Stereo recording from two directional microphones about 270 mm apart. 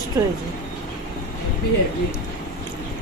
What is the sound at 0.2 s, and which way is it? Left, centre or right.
Speech, centre.